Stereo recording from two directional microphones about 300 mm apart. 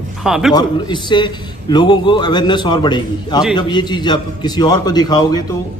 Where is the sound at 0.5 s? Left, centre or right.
Centre.